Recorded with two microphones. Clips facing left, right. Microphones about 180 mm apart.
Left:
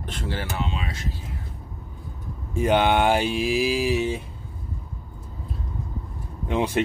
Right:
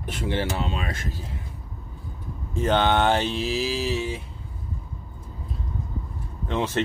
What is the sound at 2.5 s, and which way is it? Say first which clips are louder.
Speech: left 1 dB; 10° left (ahead or behind).